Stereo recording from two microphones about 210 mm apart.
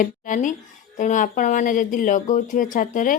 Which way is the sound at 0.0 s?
40° left (ahead or behind).